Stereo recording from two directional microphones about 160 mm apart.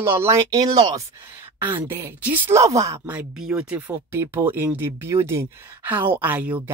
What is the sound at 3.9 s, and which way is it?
Speech, 15° right (ahead or behind).